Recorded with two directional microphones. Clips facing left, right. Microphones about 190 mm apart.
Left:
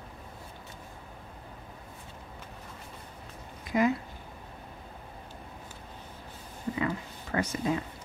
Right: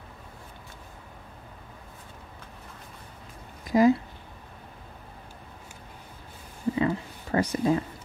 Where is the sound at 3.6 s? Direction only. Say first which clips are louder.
Right 6 dB; 35° right (ahead or behind).